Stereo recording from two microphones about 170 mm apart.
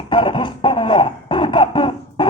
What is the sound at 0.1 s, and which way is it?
Music, 30° left (ahead or behind).